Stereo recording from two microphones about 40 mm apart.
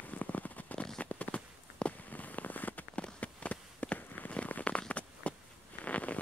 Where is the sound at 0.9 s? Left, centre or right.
Left.